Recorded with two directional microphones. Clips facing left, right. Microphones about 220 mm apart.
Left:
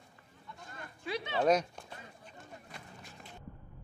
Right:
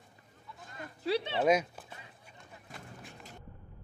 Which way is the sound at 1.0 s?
35° right (ahead or behind).